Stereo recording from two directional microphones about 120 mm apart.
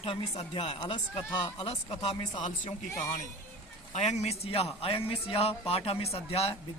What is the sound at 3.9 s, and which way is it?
Speech, 70° left (ahead or behind).